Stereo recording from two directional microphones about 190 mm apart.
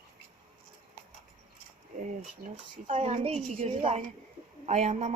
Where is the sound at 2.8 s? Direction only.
35° right (ahead or behind).